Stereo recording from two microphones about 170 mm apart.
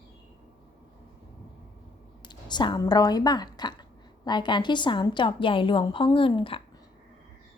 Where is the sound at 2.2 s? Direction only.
25° left (ahead or behind).